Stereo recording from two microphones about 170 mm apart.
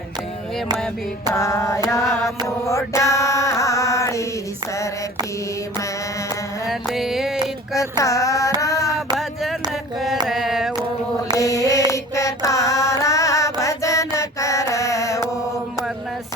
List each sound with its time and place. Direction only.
1.3 s mantra: 15° left (ahead or behind)
6.7 s music: centre (ahead or behind)
7.8 s a sound: 20° left (ahead or behind)
10.2 s carnatic music: 5° right (ahead or behind)
11.3 s mantra: 20° left (ahead or behind)